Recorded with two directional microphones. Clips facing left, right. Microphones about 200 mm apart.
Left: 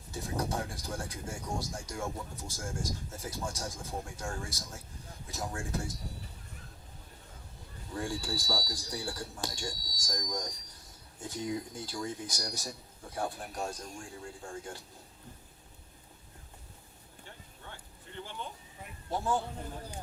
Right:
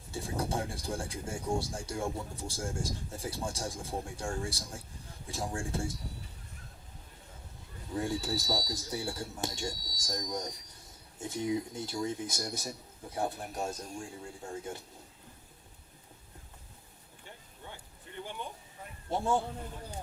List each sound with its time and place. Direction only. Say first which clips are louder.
0.1 s speech: right 1 dB; 30° right (ahead or behind)
7.9 s speech: right 3 dB; 20° right (ahead or behind)
19.1 s speech: right 2 dB; 25° right (ahead or behind)